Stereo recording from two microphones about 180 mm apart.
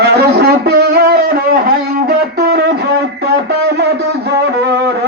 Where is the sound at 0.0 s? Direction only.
60° right (ahead or behind).